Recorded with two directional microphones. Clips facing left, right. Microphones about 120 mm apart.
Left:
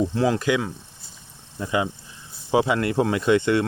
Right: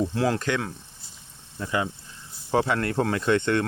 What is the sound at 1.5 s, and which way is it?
Speech, 15° left (ahead or behind).